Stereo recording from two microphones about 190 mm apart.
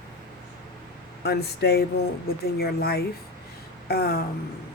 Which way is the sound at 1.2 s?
60° left (ahead or behind).